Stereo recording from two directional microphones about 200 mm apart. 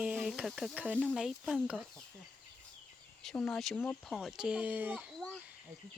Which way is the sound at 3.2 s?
5° left (ahead or behind).